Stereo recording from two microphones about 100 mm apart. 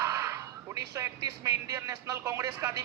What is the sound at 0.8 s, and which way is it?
Speech, 30° right (ahead or behind).